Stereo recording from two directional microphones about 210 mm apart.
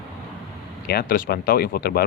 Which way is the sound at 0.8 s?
45° left (ahead or behind).